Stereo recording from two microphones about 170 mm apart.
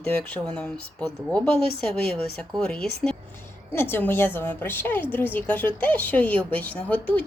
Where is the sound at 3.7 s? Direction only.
15° left (ahead or behind).